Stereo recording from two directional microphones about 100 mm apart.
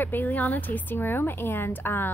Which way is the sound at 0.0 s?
20° left (ahead or behind).